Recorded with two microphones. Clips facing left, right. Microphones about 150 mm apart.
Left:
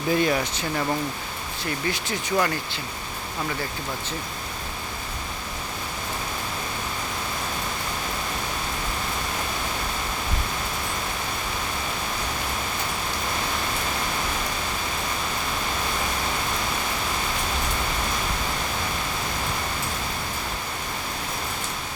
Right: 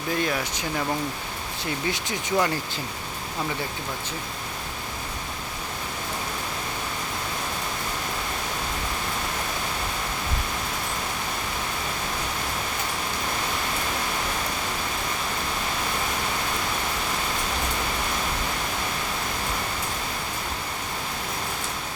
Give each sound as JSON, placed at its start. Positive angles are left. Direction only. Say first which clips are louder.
{"t": 0.1, "sound": "speech", "louder": "left 4 dB", "side_deg": 0}
{"t": 1.9, "sound": "speech", "louder": "left 1 dB", "side_deg": -20}